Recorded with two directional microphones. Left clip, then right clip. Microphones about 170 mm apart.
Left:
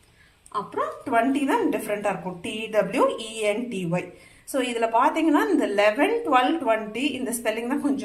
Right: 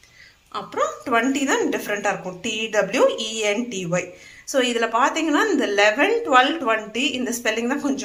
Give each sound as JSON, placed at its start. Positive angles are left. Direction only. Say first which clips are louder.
{"t": 0.5, "sound": "a woman's voice", "louder": "right 3 dB", "side_deg": -15}
{"t": 1.5, "sound": "a woman's voice", "louder": "right 2 dB", "side_deg": -5}